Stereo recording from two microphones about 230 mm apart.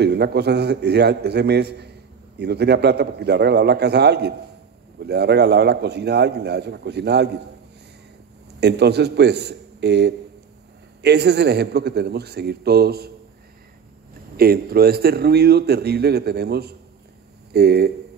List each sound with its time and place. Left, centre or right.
0.0 s a man's voice: right
8.5 s a man's voice: right
14.3 s a man's voice: right